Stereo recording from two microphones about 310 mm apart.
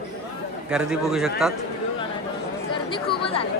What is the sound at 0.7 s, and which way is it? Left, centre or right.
Speech, centre.